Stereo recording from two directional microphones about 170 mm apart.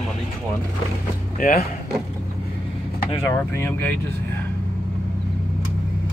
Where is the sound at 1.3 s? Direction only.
60° left (ahead or behind).